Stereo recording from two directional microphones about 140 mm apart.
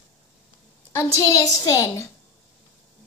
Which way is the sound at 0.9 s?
20° left (ahead or behind).